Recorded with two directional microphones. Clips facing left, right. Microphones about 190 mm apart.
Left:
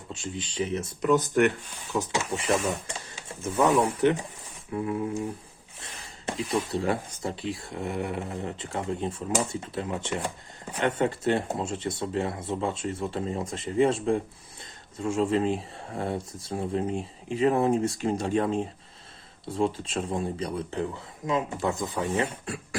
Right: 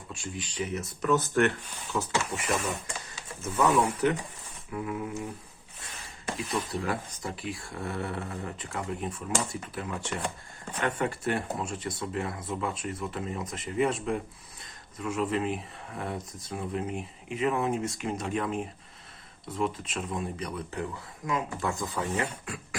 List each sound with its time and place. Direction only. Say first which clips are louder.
0.1 s speech: left 3 dB; 25° left (ahead or behind)
1.1 s speech: left 3 dB; 15° left (ahead or behind); by 5.0 s 30° left (ahead or behind)
6.2 s speech: left 4 dB; 25° left (ahead or behind)